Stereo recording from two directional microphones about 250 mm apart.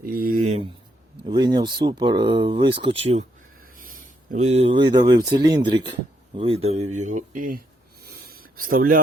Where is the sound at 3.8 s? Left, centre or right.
Right.